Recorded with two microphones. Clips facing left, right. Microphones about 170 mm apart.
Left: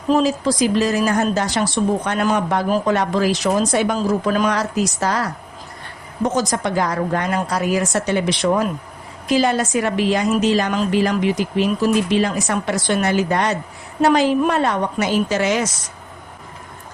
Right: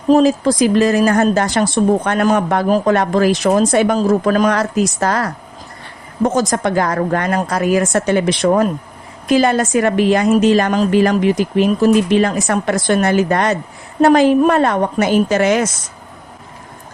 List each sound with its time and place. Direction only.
0.1 s a woman's voice: 50° right (ahead or behind)